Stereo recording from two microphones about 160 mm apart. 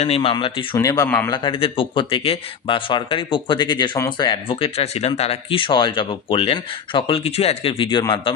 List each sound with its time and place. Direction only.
0.0 s speech: 35° left (ahead or behind)
0.7 s speech: 20° left (ahead or behind)
1.3 s speech: 35° left (ahead or behind)